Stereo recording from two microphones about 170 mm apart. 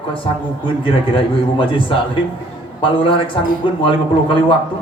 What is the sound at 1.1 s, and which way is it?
A man's voice, 30° left (ahead or behind).